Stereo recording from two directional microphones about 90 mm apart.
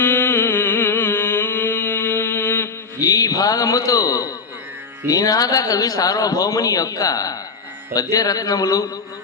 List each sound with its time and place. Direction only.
0.0 s music: 25° left (ahead or behind)
3.0 s a man's voice: 45° left (ahead or behind)